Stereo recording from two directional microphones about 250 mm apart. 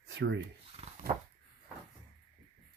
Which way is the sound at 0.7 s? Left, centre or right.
Right.